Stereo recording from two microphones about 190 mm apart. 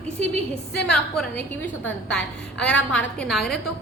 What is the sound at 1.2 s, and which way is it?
A woman's voice, 10° left (ahead or behind).